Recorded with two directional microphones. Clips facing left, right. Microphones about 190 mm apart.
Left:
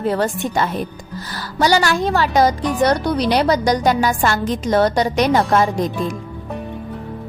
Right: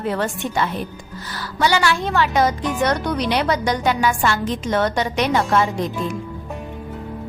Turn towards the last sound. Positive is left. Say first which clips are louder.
# left 3 dB
turn(degrees=40)  # may be behind; listen again after turning